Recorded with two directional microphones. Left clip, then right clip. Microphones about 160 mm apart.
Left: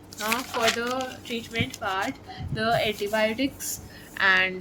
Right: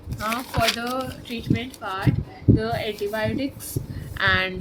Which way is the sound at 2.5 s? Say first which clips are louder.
Even; 30° left (ahead or behind).